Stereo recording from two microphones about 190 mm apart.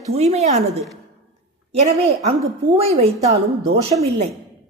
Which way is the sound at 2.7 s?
30° right (ahead or behind).